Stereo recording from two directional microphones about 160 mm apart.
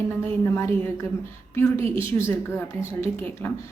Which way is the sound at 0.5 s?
15° left (ahead or behind).